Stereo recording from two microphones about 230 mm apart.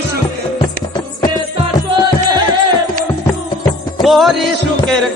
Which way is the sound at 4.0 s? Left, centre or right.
Centre.